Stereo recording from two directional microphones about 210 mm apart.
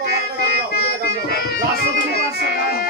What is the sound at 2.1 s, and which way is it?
Music, 50° left (ahead or behind).